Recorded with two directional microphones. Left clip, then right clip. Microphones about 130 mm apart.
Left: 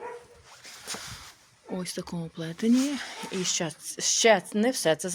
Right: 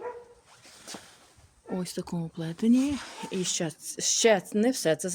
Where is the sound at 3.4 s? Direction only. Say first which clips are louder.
Left 2 dB; 40° right (ahead or behind).